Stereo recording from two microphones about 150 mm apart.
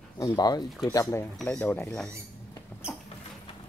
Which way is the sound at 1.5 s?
15° left (ahead or behind).